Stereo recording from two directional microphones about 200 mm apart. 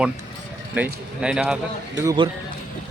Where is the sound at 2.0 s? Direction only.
20° right (ahead or behind).